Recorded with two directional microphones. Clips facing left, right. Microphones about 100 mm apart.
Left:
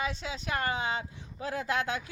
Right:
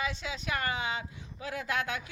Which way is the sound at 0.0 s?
35° left (ahead or behind).